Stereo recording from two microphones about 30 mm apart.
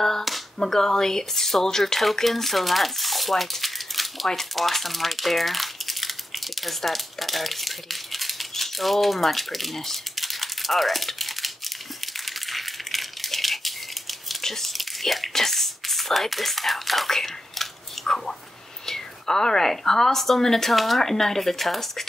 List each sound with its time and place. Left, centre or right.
0.6 s speech: centre
2.2 s speech: centre
12.3 s rattle: centre
14.4 s tearing: centre
14.7 s whispering: centre
15.3 s speech: centre
17.1 s whispering: centre
18.9 s a sound: centre
19.8 s speech: centre
20.7 s speech: centre
21.0 s speech: centre